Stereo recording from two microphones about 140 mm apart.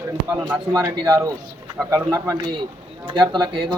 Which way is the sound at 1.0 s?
25° right (ahead or behind).